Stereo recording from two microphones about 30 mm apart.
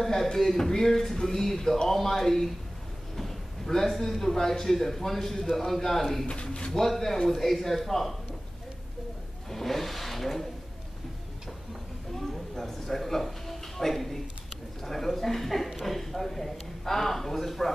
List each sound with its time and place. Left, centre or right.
0.0 s speech: centre
3.2 s a sound: centre
3.9 s speech: centre
6.2 s speech: left
6.7 s speech: centre
9.5 s vehicle: centre
12.5 s a sound: centre